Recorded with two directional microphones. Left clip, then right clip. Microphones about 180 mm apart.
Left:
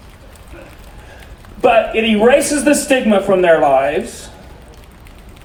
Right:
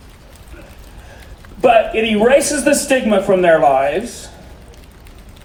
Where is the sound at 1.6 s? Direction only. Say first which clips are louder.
Even; 35° right (ahead or behind).